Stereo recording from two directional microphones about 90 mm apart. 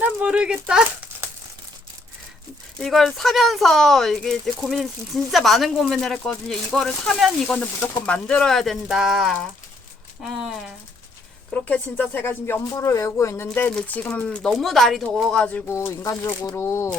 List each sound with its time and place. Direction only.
0.0 s speech: 15° right (ahead or behind)
2.7 s speech: 5° left (ahead or behind)
11.5 s speech: 20° left (ahead or behind)
13.7 s speech: 15° left (ahead or behind)
15.6 s speech: 30° left (ahead or behind); by 16.6 s 45° left (ahead or behind)
16.6 s speech: 30° left (ahead or behind)